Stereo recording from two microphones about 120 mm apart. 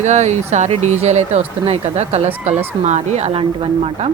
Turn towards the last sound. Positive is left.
turn(degrees=-50)  # may be behind; listen again after turning